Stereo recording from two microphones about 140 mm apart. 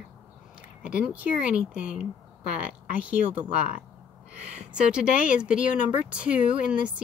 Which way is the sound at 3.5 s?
75° left (ahead or behind).